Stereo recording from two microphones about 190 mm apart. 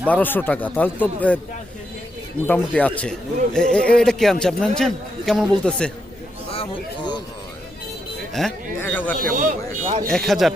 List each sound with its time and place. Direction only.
0.1 s speech: 10° left (ahead or behind)
2.5 s a man's voice: 5° left (ahead or behind)
6.5 s a sound: 25° left (ahead or behind)
8.3 s speech: centre (ahead or behind)
9.3 s speech: 45° right (ahead or behind)
10.1 s a man's voice: centre (ahead or behind)